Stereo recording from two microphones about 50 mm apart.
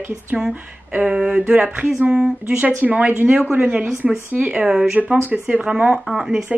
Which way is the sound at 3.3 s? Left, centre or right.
Right.